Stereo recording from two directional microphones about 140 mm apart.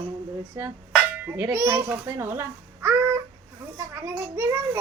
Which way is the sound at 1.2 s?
10° right (ahead or behind).